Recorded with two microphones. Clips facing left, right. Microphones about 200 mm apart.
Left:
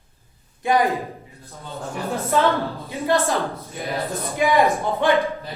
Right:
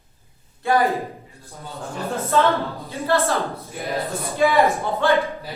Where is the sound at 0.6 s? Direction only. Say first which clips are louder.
Even; 15° left (ahead or behind).